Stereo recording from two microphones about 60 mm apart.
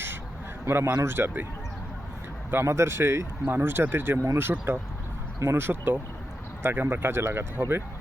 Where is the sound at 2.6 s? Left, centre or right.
Right.